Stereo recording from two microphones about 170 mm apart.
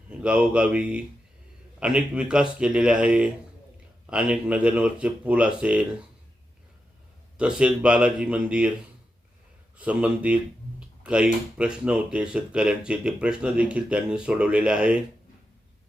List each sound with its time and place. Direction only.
0.1 s speech: 5° right (ahead or behind)
7.3 s speech: 5° right (ahead or behind)
9.7 s speech: 10° right (ahead or behind)